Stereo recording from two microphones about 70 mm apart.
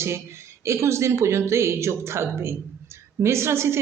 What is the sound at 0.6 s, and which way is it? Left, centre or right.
A woman's voice, right.